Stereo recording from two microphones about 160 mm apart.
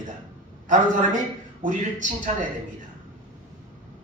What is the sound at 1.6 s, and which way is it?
Speech, 55° right (ahead or behind).